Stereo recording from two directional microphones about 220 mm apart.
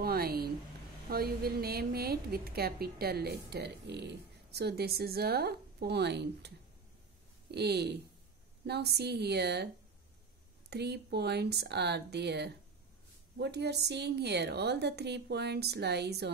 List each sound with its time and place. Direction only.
0.0 s a sound: 45° right (ahead or behind)
1.0 s a woman's voice: 45° right (ahead or behind)
7.5 s a woman's voice: 50° right (ahead or behind)
10.7 s a woman's voice: 50° right (ahead or behind)